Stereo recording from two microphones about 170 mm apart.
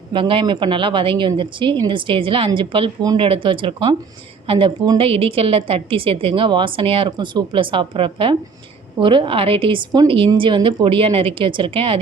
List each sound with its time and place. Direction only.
0.1 s a woman's voice: 30° right (ahead or behind)